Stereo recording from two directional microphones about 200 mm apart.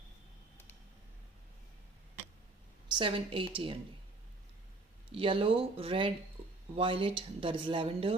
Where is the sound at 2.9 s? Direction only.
25° right (ahead or behind).